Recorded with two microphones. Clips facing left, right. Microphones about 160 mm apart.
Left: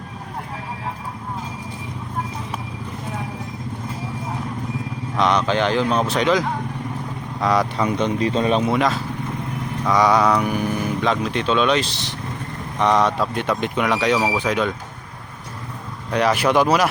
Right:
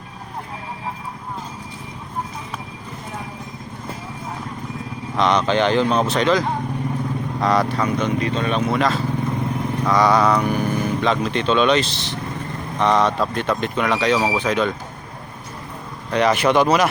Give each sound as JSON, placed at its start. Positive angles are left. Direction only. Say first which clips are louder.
{"t": 5.1, "sound": "speech", "louder": "right 1 dB", "side_deg": 10}
{"t": 7.4, "sound": "speech", "louder": "even", "side_deg": 10}
{"t": 7.9, "sound": "speech", "louder": "left 1 dB", "side_deg": 30}
{"t": 8.7, "sound": "speech", "louder": "right 1 dB", "side_deg": 10}
{"t": 16.1, "sound": "speech", "louder": "right 1 dB", "side_deg": 5}